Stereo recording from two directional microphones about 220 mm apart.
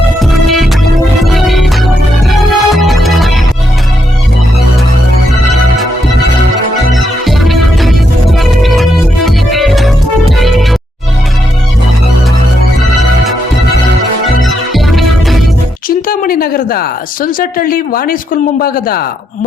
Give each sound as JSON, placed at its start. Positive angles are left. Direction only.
{"t": 0.2, "sound": "music", "side_deg": 0}
{"t": 6.9, "sound": "music", "side_deg": 0}
{"t": 14.7, "sound": "music", "side_deg": 0}
{"t": 16.0, "sound": "speech", "side_deg": 40}